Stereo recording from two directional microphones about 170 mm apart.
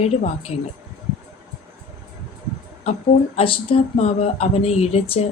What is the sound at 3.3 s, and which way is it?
Speech, 35° left (ahead or behind).